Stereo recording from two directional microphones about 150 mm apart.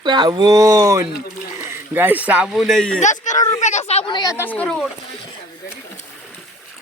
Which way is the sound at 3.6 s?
50° left (ahead or behind).